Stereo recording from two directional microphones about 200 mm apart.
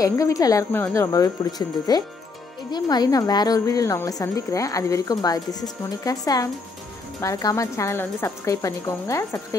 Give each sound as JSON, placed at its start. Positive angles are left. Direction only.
{"t": 0.0, "sound": "a woman's voice", "side_deg": 15}